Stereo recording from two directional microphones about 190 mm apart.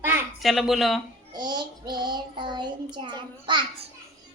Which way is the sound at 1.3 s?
20° right (ahead or behind).